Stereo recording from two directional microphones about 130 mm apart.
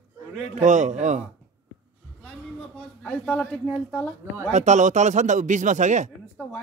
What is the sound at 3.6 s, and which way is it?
Speech, 10° right (ahead or behind).